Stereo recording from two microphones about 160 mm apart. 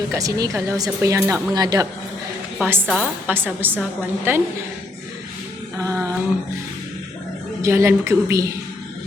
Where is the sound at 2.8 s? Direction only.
5° left (ahead or behind).